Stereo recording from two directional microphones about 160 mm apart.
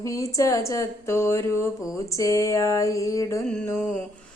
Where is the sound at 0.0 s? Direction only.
20° left (ahead or behind).